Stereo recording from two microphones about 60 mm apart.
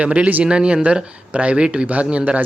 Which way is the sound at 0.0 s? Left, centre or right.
Right.